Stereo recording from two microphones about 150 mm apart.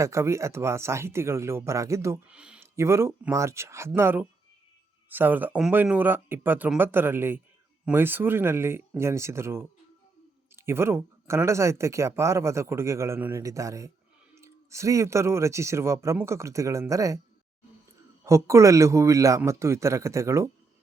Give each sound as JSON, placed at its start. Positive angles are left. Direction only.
{"t": 0.0, "sound": "speech", "side_deg": -20}
{"t": 2.2, "sound": "speech", "side_deg": -5}
{"t": 2.7, "sound": "speech", "side_deg": -20}
{"t": 18.3, "sound": "speech", "side_deg": -20}